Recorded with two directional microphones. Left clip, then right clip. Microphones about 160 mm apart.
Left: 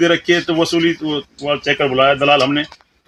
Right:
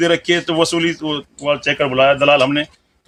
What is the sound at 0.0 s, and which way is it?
A man's voice, 20° right (ahead or behind).